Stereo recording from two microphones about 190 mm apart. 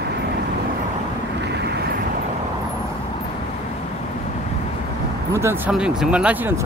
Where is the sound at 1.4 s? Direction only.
60° right (ahead or behind).